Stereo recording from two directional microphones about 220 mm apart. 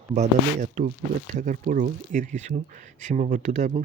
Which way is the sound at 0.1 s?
30° right (ahead or behind).